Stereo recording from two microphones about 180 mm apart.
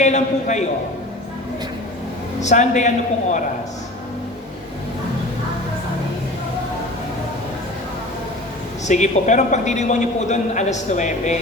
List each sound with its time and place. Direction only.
0.0 s a sound: 40° left (ahead or behind)
2.4 s a man's voice: 40° left (ahead or behind)
8.9 s a man's voice: 40° left (ahead or behind)